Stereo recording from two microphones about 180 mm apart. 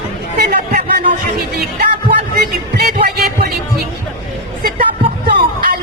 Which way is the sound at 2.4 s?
60° right (ahead or behind).